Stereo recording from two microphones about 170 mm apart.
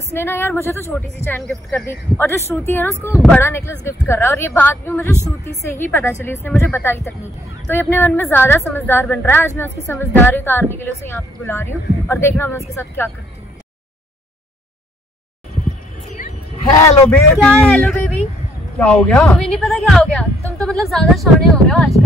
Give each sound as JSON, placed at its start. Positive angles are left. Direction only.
{"t": 0.1, "sound": "a woman's voice", "side_deg": 15}
{"t": 1.5, "sound": "a woman's voice", "side_deg": 0}
{"t": 1.9, "sound": "a woman's voice", "side_deg": 15}
{"t": 16.7, "sound": "a man's voice", "side_deg": 20}
{"t": 17.4, "sound": "a woman's voice", "side_deg": 5}